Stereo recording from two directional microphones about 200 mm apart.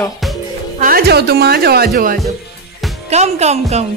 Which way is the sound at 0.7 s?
45° right (ahead or behind).